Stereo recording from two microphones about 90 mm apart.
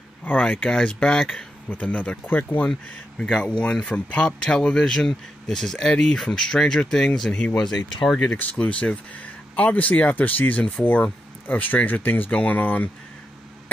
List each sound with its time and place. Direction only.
0.2 s speech: 15° left (ahead or behind)